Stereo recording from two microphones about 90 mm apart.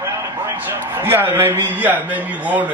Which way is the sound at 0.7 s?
25° right (ahead or behind).